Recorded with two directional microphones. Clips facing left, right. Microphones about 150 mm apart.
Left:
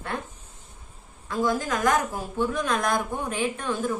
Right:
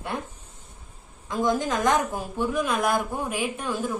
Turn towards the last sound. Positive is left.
turn(degrees=-10)  # may be behind; listen again after turning